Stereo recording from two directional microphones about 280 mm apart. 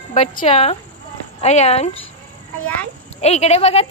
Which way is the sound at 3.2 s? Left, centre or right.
Left.